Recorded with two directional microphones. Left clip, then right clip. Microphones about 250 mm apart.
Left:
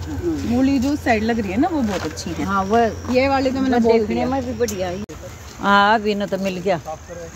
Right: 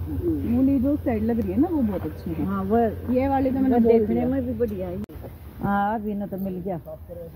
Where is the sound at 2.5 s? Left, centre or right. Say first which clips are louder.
Left 6 dB; right.